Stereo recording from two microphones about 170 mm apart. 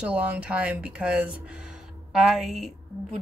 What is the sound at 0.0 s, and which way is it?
Speech, 5° right (ahead or behind).